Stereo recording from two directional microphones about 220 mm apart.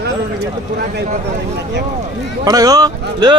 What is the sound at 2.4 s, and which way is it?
Speech, 15° right (ahead or behind).